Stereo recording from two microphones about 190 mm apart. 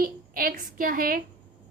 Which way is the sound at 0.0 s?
50° right (ahead or behind).